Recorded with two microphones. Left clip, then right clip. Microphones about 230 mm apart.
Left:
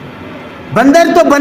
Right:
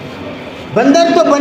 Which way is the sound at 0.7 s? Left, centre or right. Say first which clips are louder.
Left 2 dB; left.